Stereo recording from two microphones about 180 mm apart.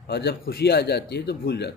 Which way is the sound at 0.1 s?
65° left (ahead or behind).